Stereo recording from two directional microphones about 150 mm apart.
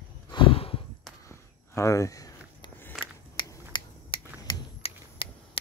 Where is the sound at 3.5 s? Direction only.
30° left (ahead or behind).